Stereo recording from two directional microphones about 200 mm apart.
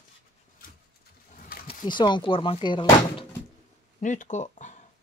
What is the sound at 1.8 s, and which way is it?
Speech, 20° left (ahead or behind).